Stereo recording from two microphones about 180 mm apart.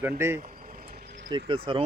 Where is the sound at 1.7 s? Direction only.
30° right (ahead or behind).